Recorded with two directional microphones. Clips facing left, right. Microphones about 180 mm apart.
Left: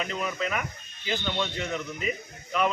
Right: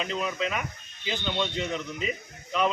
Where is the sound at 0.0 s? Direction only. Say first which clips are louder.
Right 1 dB; centre (ahead or behind).